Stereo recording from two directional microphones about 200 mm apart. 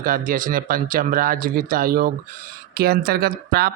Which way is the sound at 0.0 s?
45° right (ahead or behind).